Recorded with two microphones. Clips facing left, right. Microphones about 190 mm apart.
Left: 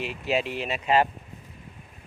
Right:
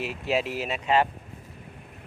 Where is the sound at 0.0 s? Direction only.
Centre (ahead or behind).